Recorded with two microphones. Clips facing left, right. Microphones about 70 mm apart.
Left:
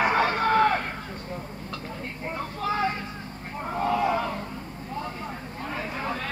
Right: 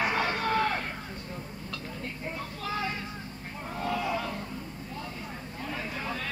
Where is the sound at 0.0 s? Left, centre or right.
Left.